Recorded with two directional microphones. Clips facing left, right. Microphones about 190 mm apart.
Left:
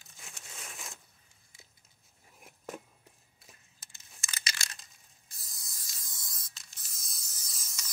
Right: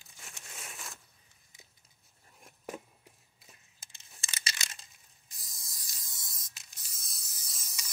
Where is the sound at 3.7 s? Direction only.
25° right (ahead or behind).